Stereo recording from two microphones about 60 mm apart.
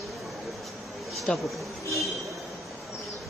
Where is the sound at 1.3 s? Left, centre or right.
Centre.